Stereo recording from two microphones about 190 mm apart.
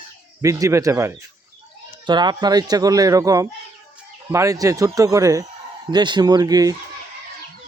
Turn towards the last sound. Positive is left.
turn(degrees=-20)  # may be behind; listen again after turning